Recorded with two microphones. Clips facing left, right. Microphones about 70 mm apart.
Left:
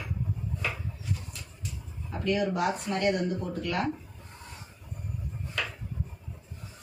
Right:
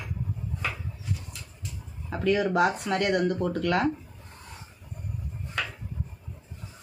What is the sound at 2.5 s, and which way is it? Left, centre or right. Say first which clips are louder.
Speech: right 5 dB; right.